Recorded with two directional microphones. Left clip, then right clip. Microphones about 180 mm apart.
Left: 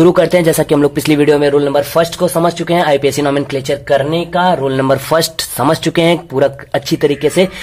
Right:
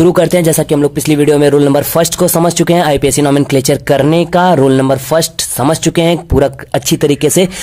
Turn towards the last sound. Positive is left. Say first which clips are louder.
# right 1 dB
turn(degrees=-30)  # may be behind; listen again after turning